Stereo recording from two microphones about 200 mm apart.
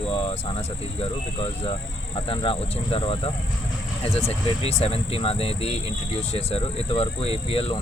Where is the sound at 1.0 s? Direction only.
30° left (ahead or behind).